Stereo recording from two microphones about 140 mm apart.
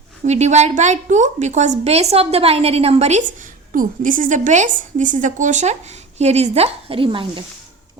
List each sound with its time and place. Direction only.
0.3 s a woman's voice: 55° right (ahead or behind)
3.7 s a woman's voice: 75° right (ahead or behind); by 7.4 s 40° right (ahead or behind)